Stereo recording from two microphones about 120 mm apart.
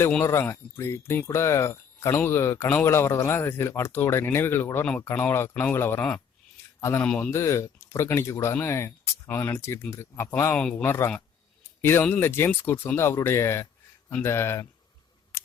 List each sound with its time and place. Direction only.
0.3 s speech: 20° left (ahead or behind)
7.0 s speech: 10° left (ahead or behind)
7.3 s speech: 25° left (ahead or behind)